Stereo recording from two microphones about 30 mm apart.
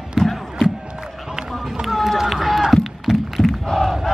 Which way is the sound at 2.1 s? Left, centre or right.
Centre.